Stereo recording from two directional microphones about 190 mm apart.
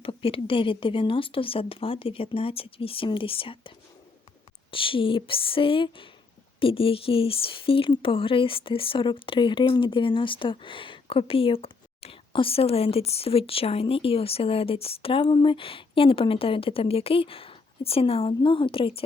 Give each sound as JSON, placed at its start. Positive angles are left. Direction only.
{"t": 0.0, "sound": "speech", "side_deg": 30}
{"t": 4.7, "sound": "speech", "side_deg": 25}